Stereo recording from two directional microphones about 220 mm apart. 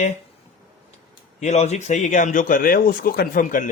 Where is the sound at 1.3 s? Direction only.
30° left (ahead or behind).